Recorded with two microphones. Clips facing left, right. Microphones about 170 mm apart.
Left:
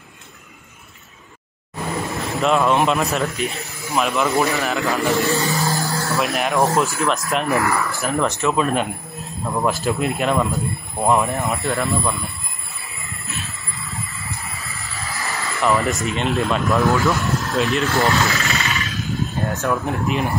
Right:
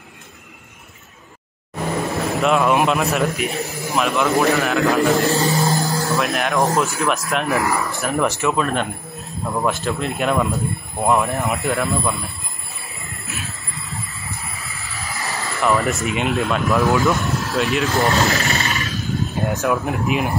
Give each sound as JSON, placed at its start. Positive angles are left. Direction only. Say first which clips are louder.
{"t": 2.1, "sound": "a man's voice", "louder": "even", "side_deg": 0}
{"t": 5.5, "sound": "vehicle", "louder": "right 3 dB", "side_deg": -20}
{"t": 6.1, "sound": "speech", "louder": "left 1 dB", "side_deg": 0}
{"t": 7.6, "sound": "speech", "louder": "even", "side_deg": -20}
{"t": 7.9, "sound": "speech", "louder": "right 1 dB", "side_deg": 0}
{"t": 15.1, "sound": "vehicle", "louder": "right 1 dB", "side_deg": -20}
{"t": 15.6, "sound": "speech", "louder": "even", "side_deg": 0}
{"t": 17.9, "sound": "speech", "louder": "right 1 dB", "side_deg": -20}
{"t": 18.2, "sound": "a sound", "louder": "right 2 dB", "side_deg": -40}
{"t": 19.0, "sound": "vehicle", "louder": "right 1 dB", "side_deg": 0}
{"t": 19.4, "sound": "speech", "louder": "right 2 dB", "side_deg": -15}
{"t": 19.8, "sound": "speech", "louder": "right 1 dB", "side_deg": 0}